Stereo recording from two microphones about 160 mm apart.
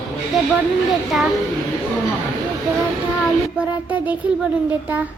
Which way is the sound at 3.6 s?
10° right (ahead or behind).